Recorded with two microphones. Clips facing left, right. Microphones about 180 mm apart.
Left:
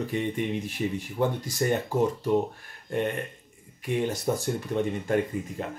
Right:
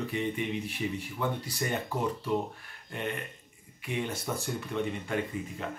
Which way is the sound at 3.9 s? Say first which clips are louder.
Left 7 dB; 40° left (ahead or behind).